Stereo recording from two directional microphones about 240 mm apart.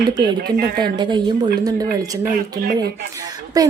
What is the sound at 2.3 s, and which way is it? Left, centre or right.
Speech, right.